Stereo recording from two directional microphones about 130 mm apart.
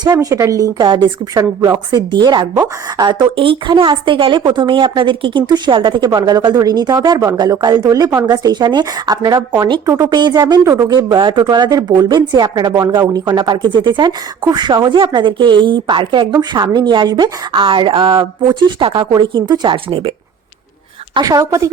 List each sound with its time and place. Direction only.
0.0 s a woman's voice: 30° right (ahead or behind)
9.8 s a woman's voice: 25° right (ahead or behind); by 20.1 s 40° right (ahead or behind)
21.2 s a woman's voice: 30° right (ahead or behind)